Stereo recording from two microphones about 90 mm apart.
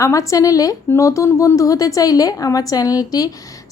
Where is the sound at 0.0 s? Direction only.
35° left (ahead or behind).